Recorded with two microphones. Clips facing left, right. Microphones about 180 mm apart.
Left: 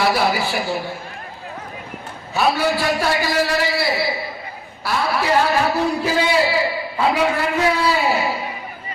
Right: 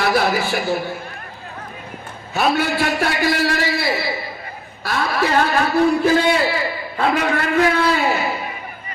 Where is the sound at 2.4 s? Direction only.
55° right (ahead or behind).